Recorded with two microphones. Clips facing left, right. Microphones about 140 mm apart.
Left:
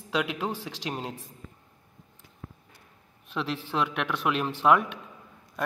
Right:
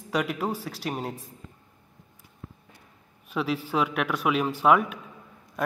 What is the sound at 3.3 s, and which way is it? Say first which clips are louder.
A man's voice: right 4 dB; 10° right (ahead or behind).